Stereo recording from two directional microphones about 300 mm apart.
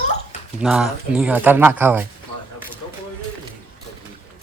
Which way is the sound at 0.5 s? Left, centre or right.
Centre.